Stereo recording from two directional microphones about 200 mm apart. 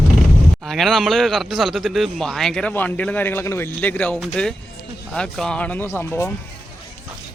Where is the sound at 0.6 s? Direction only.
Centre (ahead or behind).